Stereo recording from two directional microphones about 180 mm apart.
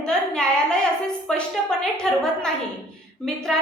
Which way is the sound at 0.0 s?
5° left (ahead or behind).